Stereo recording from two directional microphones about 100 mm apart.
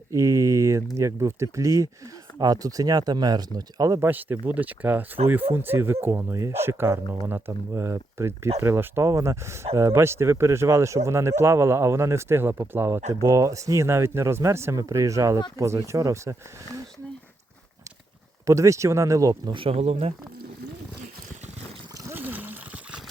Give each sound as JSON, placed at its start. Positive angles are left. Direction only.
{"t": 0.1, "sound": "a sound", "side_deg": -30}
{"t": 0.9, "sound": "speech", "side_deg": -30}
{"t": 4.0, "sound": "speech", "side_deg": -20}
{"t": 18.4, "sound": "speech", "side_deg": -30}
{"t": 19.5, "sound": "speech", "side_deg": -65}
{"t": 22.1, "sound": "trickle", "side_deg": -20}